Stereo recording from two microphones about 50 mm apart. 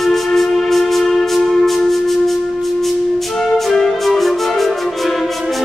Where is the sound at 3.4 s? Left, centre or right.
Centre.